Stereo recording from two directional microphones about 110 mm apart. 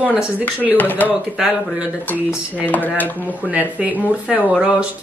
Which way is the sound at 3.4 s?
15° right (ahead or behind).